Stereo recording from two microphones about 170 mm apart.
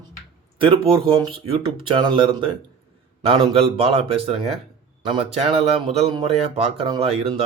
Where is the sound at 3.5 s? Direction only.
35° right (ahead or behind).